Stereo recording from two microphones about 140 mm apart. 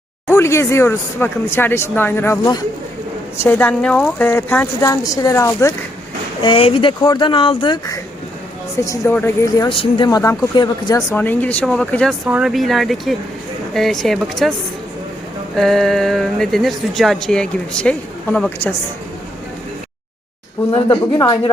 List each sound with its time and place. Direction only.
0.3 s a woman's voice: 20° left (ahead or behind)
6.4 s a woman's voice: 40° left (ahead or behind); by 9.5 s 15° left (ahead or behind)
9.6 s speech: 40° left (ahead or behind)
10.1 s speech: 25° left (ahead or behind)
11.1 s a woman's voice: 10° left (ahead or behind)
15.5 s speech: 5° left (ahead or behind)
20.7 s speech: 35° left (ahead or behind)